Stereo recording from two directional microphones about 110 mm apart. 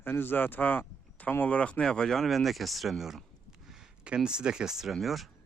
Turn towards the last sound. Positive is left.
turn(degrees=0)  # may be behind; listen again after turning